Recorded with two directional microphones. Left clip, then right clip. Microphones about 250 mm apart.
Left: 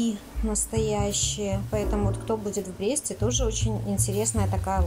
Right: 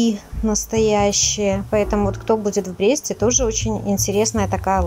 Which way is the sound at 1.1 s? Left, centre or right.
Right.